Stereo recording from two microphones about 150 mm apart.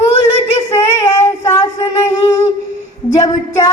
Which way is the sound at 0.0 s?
40° left (ahead or behind).